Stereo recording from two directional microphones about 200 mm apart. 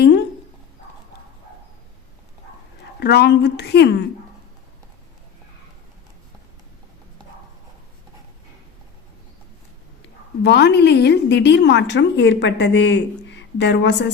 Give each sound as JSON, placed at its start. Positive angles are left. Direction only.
{"t": 3.0, "sound": "a woman's voice", "side_deg": 55}
{"t": 10.4, "sound": "a woman's voice", "side_deg": 55}